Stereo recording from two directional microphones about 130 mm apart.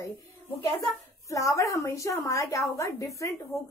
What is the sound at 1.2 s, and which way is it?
A woman's voice, 25° left (ahead or behind).